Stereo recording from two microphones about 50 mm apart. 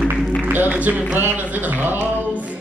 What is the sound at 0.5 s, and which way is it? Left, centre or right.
Mantra, right.